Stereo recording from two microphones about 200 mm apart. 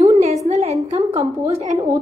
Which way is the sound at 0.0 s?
30° right (ahead or behind).